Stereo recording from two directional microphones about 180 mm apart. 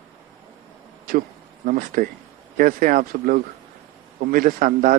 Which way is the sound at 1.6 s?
50° right (ahead or behind).